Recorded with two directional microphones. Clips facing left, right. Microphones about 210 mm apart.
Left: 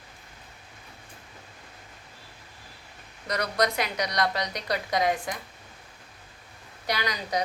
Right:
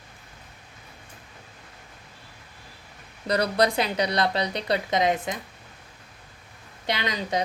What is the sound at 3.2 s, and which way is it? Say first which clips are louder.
A woman's voice: right 4 dB; 30° right (ahead or behind).